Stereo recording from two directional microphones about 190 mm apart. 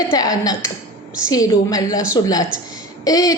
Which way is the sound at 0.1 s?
20° left (ahead or behind).